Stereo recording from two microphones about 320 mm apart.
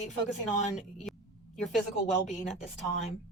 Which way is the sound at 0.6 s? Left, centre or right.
Left.